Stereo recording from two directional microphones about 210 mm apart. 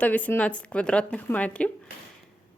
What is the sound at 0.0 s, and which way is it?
Speech, 10° left (ahead or behind).